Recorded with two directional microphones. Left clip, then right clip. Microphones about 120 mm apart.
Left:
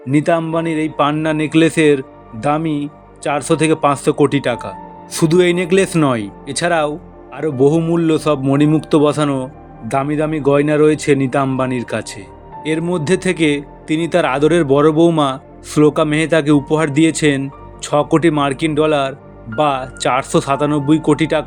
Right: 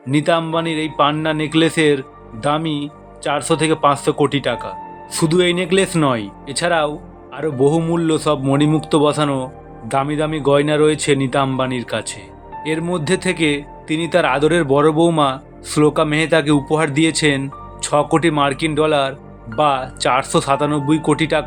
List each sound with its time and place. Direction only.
0.1 s a man's voice: 50° left (ahead or behind)